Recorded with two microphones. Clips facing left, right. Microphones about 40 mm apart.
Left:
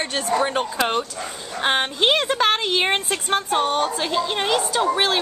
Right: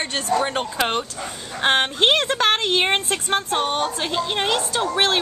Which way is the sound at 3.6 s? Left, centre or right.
Right.